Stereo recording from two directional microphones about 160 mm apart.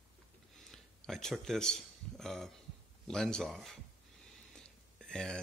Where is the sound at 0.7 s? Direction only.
Centre (ahead or behind).